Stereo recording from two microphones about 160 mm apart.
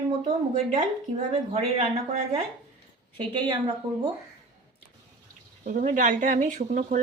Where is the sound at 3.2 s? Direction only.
35° right (ahead or behind).